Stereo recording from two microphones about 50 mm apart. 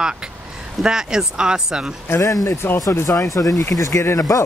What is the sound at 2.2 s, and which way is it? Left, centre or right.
Speech, left.